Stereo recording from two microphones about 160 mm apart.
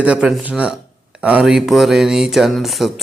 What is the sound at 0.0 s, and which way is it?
Speech, 5° right (ahead or behind).